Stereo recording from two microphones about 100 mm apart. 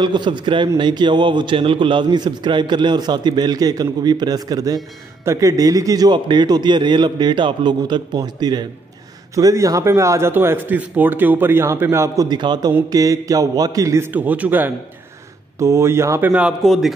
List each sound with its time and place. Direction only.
0.0 s a man's voice: 50° right (ahead or behind); by 12.3 s 30° right (ahead or behind)
12.3 s a man's voice: 45° right (ahead or behind)
12.9 s a sound: 35° right (ahead or behind)
14.1 s speech: 15° right (ahead or behind)
15.6 s speech: 30° right (ahead or behind)
16.6 s speech: centre (ahead or behind)